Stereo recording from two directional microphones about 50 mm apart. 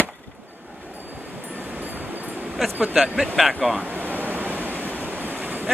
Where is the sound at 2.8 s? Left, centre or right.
Centre.